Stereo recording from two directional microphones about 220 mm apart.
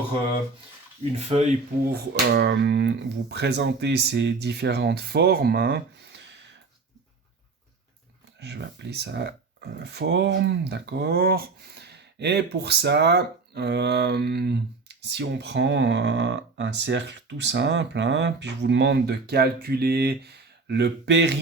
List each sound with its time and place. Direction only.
1.1 s speech: 30° right (ahead or behind)
1.9 s speech: 50° right (ahead or behind)
8.4 s speech: 50° right (ahead or behind)